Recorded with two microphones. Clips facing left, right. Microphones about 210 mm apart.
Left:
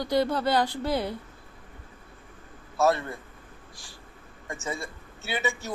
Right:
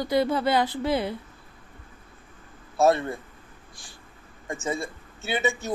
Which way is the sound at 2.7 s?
25° right (ahead or behind).